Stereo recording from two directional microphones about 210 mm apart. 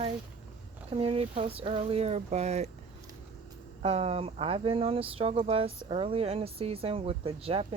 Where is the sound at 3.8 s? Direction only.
30° right (ahead or behind).